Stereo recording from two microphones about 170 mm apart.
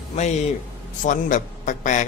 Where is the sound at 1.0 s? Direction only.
50° left (ahead or behind).